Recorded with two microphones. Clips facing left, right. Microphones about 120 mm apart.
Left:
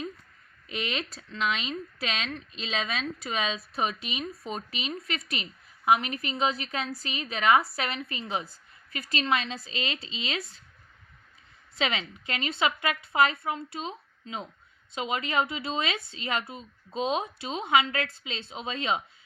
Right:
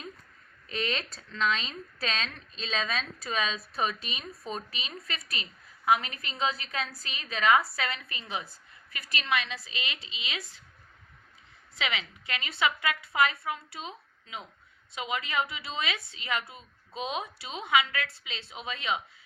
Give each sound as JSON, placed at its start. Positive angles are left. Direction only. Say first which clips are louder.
{"t": 0.7, "sound": "speech", "louder": "even", "side_deg": 15}
{"t": 11.8, "sound": "speech", "louder": "left 4 dB", "side_deg": 30}